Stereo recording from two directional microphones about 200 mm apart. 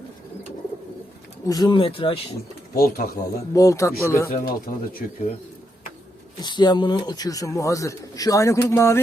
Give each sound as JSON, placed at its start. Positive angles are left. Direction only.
{"t": 1.5, "sound": "speech", "side_deg": 20}
{"t": 2.7, "sound": "speech", "side_deg": 45}
{"t": 3.5, "sound": "speech", "side_deg": 15}
{"t": 4.3, "sound": "speech", "side_deg": 45}
{"t": 6.4, "sound": "speech", "side_deg": 20}